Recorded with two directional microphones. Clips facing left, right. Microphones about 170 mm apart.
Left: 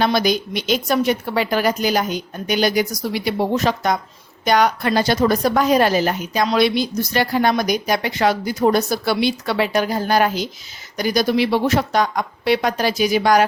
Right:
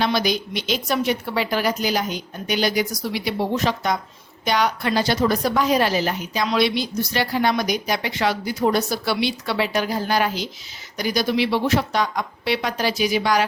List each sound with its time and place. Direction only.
0.0 s a woman's voice: 50° left (ahead or behind)